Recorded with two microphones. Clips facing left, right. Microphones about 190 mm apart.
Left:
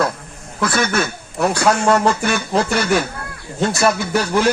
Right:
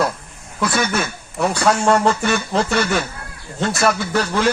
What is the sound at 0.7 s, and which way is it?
Speech, centre (ahead or behind).